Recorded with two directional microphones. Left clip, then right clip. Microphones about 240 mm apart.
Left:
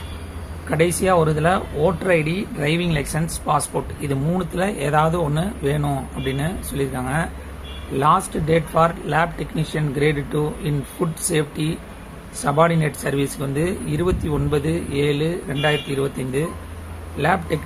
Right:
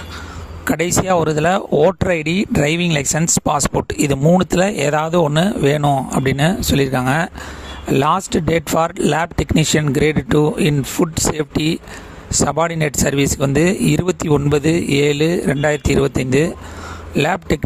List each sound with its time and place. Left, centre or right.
0.7 s speech: right